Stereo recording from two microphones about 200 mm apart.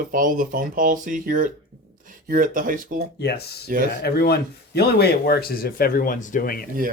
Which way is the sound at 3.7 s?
45° right (ahead or behind).